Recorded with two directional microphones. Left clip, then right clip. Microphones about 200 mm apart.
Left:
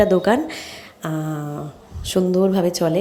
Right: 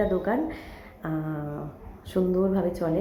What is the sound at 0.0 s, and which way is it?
A woman's voice, 40° left (ahead or behind).